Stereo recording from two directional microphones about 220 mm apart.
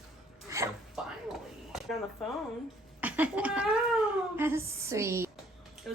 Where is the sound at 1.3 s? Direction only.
Centre (ahead or behind).